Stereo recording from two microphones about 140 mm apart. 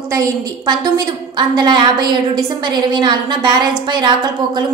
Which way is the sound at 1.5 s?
30° right (ahead or behind).